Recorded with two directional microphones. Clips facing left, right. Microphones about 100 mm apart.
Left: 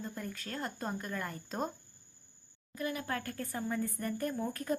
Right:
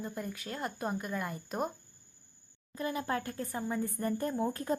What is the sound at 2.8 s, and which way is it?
Speech, 25° right (ahead or behind).